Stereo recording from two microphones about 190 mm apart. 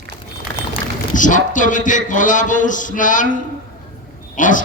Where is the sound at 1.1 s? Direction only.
40° left (ahead or behind).